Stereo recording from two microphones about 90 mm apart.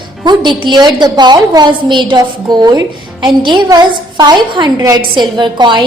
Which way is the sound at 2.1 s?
50° right (ahead or behind).